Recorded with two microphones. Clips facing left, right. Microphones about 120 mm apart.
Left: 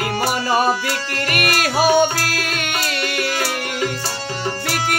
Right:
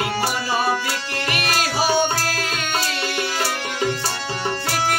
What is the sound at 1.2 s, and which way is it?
Music, 55° left (ahead or behind).